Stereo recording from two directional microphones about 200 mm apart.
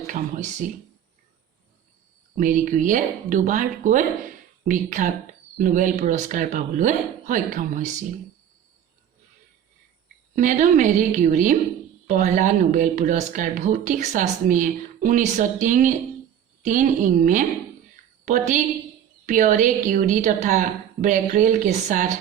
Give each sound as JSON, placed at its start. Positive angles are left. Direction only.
{"t": 0.1, "sound": "speech", "side_deg": -40}
{"t": 2.4, "sound": "speech", "side_deg": -40}
{"t": 10.3, "sound": "speech", "side_deg": -40}